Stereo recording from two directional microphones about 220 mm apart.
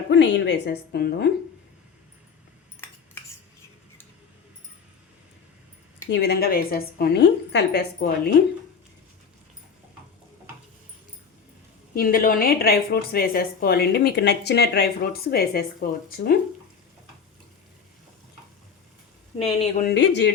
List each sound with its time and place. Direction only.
0.1 s a woman's voice: 55° left (ahead or behind)
6.1 s a woman's voice: 50° left (ahead or behind)
11.9 s a woman's voice: 40° left (ahead or behind)
19.8 s a woman's voice: 50° left (ahead or behind)